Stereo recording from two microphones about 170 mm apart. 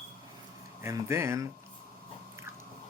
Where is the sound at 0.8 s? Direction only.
15° right (ahead or behind).